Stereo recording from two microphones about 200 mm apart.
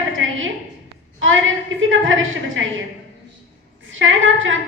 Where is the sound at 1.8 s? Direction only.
75° right (ahead or behind).